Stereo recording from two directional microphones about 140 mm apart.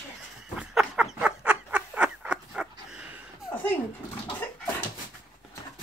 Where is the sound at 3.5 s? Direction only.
10° left (ahead or behind).